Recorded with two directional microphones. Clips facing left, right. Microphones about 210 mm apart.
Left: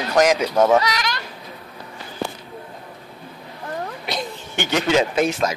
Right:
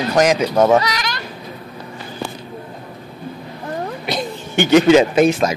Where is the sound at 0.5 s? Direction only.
10° right (ahead or behind).